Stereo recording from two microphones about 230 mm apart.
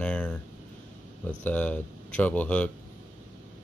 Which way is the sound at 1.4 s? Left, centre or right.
Centre.